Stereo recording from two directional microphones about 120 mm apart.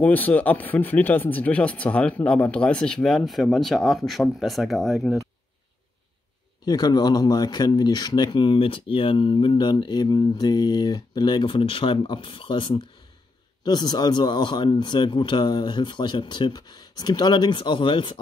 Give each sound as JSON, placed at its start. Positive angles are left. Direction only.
{"t": 0.0, "sound": "speech", "side_deg": 15}
{"t": 6.6, "sound": "speech", "side_deg": 35}